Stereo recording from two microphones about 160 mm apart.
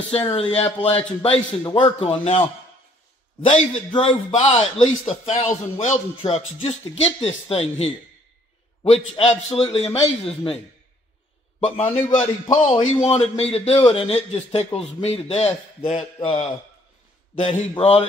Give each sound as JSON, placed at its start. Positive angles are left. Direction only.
{"t": 0.4, "sound": "a man's voice", "side_deg": 40}
{"t": 3.4, "sound": "a man's voice", "side_deg": 35}
{"t": 8.9, "sound": "a man's voice", "side_deg": 40}
{"t": 11.8, "sound": "a man's voice", "side_deg": 15}
{"t": 12.6, "sound": "a man's voice", "side_deg": 40}